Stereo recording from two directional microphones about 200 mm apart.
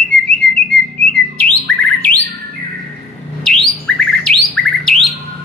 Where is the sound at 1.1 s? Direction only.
5° left (ahead or behind).